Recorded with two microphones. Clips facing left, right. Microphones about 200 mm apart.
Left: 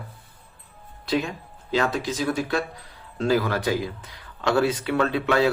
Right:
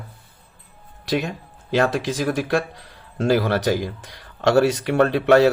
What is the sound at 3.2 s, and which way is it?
Speech, 90° right.